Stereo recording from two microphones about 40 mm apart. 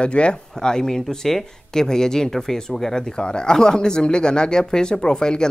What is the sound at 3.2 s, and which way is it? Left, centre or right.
Speech, left.